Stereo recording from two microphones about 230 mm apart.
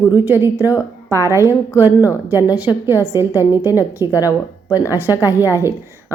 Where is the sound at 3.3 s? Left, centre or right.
Centre.